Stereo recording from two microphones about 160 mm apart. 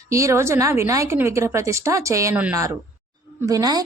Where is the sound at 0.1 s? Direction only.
20° right (ahead or behind).